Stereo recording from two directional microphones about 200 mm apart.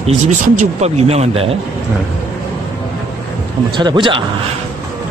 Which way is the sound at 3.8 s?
25° right (ahead or behind).